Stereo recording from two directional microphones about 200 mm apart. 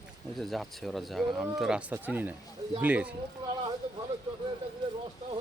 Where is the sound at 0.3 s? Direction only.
Centre (ahead or behind).